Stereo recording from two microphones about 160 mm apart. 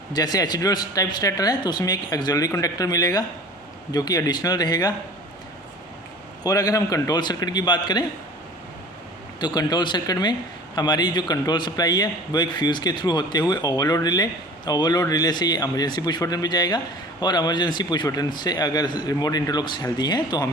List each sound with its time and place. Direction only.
0.1 s a man's voice: 25° left (ahead or behind)
6.4 s a man's voice: 20° left (ahead or behind)
9.4 s a man's voice: 25° left (ahead or behind)